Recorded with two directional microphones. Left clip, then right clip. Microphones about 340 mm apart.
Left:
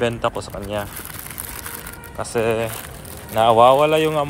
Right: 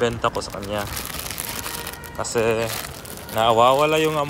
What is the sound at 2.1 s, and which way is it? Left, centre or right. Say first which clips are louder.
Speech: left 1 dB; centre.